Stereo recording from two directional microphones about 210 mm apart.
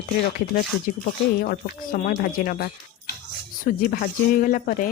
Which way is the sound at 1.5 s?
40° left (ahead or behind).